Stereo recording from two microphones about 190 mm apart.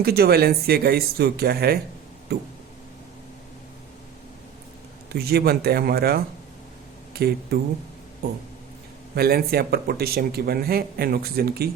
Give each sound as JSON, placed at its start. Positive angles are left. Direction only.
{"t": 0.0, "sound": "speech", "side_deg": -55}
{"t": 5.1, "sound": "speech", "side_deg": -55}
{"t": 9.1, "sound": "speech", "side_deg": -55}